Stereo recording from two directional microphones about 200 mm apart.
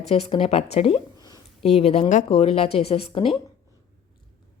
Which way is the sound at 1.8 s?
30° left (ahead or behind).